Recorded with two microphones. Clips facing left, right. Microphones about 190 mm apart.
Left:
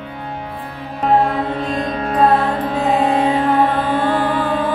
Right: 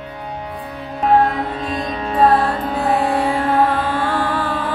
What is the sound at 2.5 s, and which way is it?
Music, 20° left (ahead or behind).